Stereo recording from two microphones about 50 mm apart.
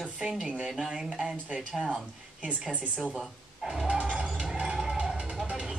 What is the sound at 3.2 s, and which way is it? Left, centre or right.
Speech, centre.